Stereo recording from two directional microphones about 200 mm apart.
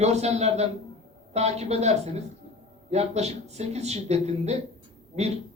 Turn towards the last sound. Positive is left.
turn(degrees=-35)  # may be behind; listen again after turning